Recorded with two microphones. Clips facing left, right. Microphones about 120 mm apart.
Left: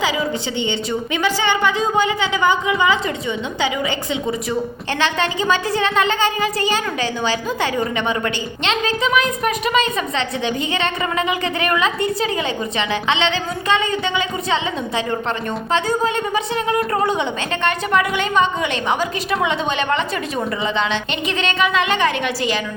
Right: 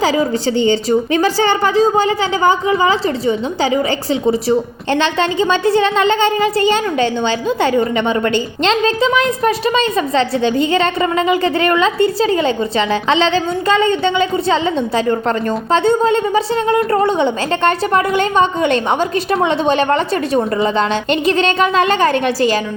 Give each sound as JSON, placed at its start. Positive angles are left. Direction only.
{"t": 0.0, "sound": "a woman's voice", "side_deg": -40}